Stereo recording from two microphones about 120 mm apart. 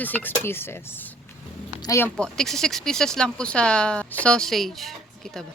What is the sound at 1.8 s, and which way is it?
Speech, 20° left (ahead or behind).